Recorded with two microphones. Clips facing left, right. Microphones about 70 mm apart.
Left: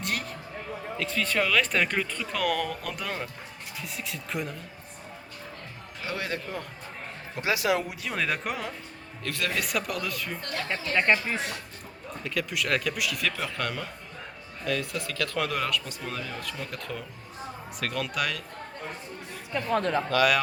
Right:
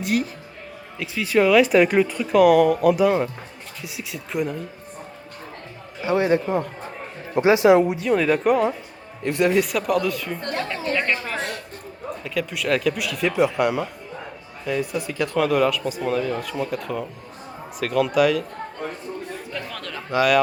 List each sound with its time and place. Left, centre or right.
0.0 s a sound: centre
0.9 s speech: centre
6.0 s speech: right
8.0 s speech: centre
9.2 s speech: right
9.6 s speech: centre
10.9 s speech: centre
12.2 s speech: centre
13.2 s speech: centre
15.4 s speech: centre
19.5 s speech: left